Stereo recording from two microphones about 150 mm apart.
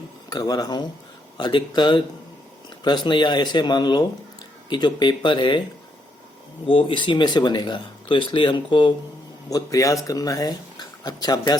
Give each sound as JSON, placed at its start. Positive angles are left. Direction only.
{"t": 0.3, "sound": "speech", "side_deg": 25}
{"t": 6.7, "sound": "speech", "side_deg": 35}